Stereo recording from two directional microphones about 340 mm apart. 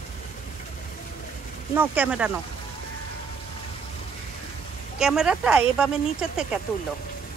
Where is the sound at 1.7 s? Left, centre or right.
Centre.